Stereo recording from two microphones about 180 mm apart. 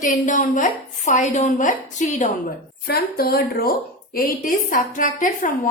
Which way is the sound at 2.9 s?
60° left (ahead or behind).